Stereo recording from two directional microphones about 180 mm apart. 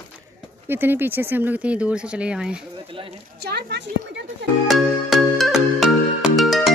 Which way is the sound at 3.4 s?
65° right (ahead or behind).